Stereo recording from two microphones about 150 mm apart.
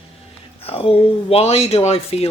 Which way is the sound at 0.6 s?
40° left (ahead or behind).